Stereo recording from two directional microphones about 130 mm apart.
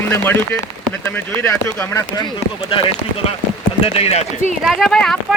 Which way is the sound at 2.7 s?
40° left (ahead or behind).